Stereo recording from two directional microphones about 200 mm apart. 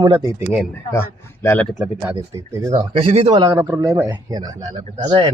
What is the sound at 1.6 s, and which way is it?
Speech, centre (ahead or behind).